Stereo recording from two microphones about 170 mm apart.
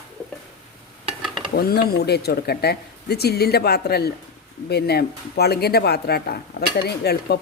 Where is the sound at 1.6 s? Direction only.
65° left (ahead or behind).